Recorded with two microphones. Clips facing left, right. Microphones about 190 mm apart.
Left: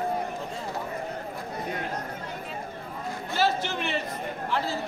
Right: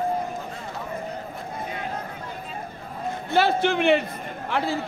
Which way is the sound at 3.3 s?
60° right (ahead or behind).